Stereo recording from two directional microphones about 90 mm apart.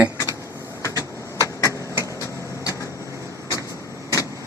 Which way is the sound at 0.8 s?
35° left (ahead or behind).